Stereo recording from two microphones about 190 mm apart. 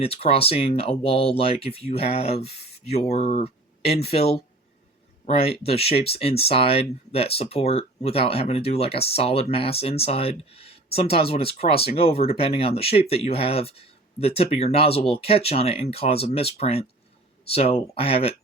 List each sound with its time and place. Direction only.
0.0 s speech: 30° left (ahead or behind)